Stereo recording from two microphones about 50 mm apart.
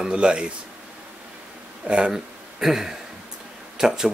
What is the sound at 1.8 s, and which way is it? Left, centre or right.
Speech, centre.